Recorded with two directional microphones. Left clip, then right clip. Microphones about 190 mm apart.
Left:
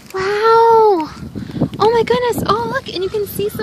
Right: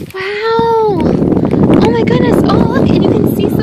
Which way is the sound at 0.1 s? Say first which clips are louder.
Left 2 dB; 10° left (ahead or behind).